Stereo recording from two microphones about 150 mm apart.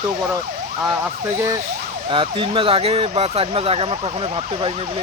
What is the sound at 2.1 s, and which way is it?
Speech, 35° right (ahead or behind).